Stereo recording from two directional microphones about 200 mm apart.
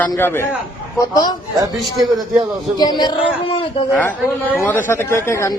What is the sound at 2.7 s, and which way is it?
A man's voice, 20° left (ahead or behind).